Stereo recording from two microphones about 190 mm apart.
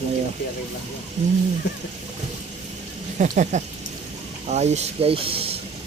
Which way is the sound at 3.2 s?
40° right (ahead or behind).